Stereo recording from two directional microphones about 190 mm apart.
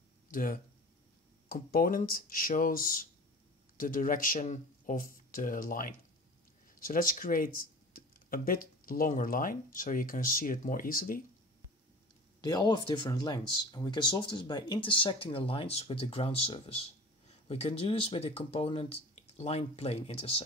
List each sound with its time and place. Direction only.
0.3 s speech: 45° left (ahead or behind)
12.4 s speech: 20° left (ahead or behind)